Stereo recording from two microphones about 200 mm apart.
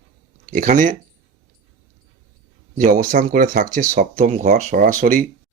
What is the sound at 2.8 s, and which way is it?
Speech, 40° right (ahead or behind).